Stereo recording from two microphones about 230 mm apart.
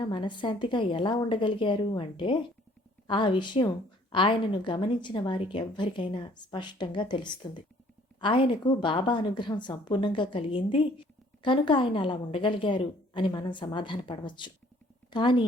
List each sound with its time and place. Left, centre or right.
0.0 s a woman's voice: centre